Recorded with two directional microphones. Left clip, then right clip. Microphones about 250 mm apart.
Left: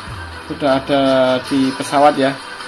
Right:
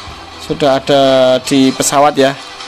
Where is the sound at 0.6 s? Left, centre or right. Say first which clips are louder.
Right 5 dB; right.